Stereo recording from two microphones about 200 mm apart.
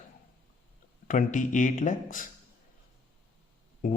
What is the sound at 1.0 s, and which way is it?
Speech, 40° left (ahead or behind).